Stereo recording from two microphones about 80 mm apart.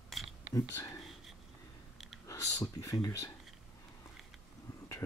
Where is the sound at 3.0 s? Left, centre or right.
Left.